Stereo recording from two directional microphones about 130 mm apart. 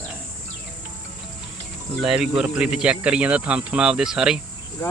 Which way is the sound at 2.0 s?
5° right (ahead or behind).